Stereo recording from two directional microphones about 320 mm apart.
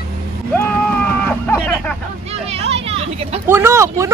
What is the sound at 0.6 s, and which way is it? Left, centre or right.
Vehicle, centre.